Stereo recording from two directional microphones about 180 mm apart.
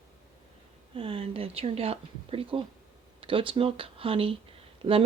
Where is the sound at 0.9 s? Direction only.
30° right (ahead or behind).